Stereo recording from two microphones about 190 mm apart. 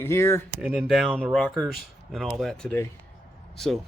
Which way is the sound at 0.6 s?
Centre (ahead or behind).